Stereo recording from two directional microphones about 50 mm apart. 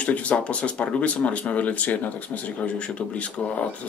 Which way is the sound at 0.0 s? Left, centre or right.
Left.